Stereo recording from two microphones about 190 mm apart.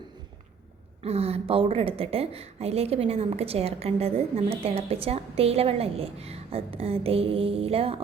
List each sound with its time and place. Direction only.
1.0 s a woman's voice: 30° right (ahead or behind)